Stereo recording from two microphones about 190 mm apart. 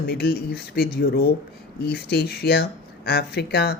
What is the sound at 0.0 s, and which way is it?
Speech, 55° left (ahead or behind).